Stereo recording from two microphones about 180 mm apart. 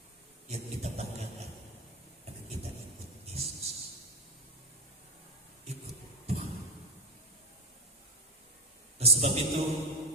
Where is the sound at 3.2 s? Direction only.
35° right (ahead or behind).